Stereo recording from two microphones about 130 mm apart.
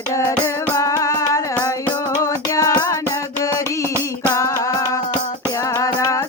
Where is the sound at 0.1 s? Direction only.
25° left (ahead or behind).